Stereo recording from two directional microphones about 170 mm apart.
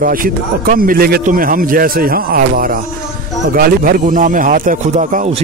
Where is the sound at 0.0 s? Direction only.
55° right (ahead or behind).